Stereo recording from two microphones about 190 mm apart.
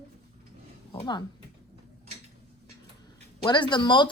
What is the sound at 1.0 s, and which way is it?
Speech, 25° left (ahead or behind).